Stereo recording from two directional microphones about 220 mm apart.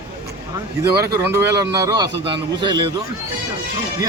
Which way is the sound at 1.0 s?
15° right (ahead or behind).